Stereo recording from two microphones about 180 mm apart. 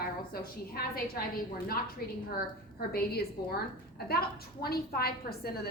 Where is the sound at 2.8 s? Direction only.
55° left (ahead or behind).